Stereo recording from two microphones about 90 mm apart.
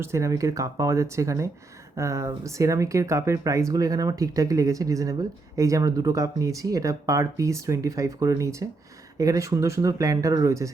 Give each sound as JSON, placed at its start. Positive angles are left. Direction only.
{"t": 0.0, "sound": "speech", "side_deg": -35}